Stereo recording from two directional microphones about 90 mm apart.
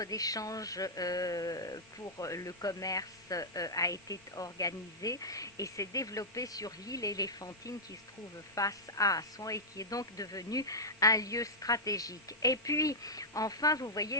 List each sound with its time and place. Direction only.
0.0 s speech: 40° left (ahead or behind)